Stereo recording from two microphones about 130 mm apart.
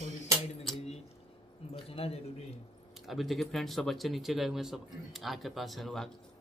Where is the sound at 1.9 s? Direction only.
50° left (ahead or behind).